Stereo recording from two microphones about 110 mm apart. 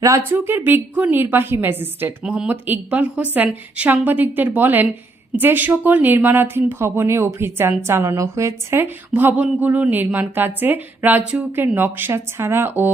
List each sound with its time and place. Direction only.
0.3 s a woman's voice: 20° right (ahead or behind)